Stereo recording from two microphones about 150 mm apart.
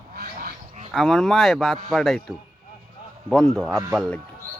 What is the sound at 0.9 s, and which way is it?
Speech, centre (ahead or behind).